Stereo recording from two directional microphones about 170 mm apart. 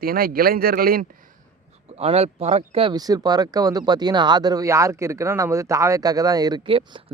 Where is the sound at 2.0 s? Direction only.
40° right (ahead or behind).